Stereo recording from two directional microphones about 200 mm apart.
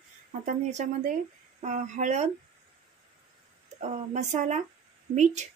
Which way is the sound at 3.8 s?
35° right (ahead or behind).